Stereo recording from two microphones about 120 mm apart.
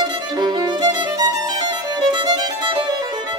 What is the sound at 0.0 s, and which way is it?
Violin, 35° right (ahead or behind).